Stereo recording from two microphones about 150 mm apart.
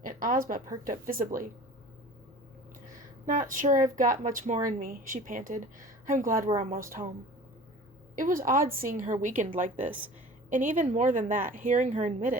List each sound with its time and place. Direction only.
0.0 s a woman's voice: 65° right (ahead or behind)
3.2 s speech: 60° right (ahead or behind)
8.1 s speech: 65° right (ahead or behind)
10.8 s speech: 55° right (ahead or behind)